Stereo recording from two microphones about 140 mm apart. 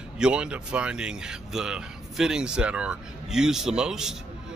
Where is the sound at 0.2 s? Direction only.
5° right (ahead or behind).